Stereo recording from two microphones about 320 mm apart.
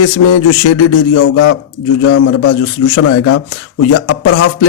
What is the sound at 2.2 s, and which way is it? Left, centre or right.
A man's voice, left.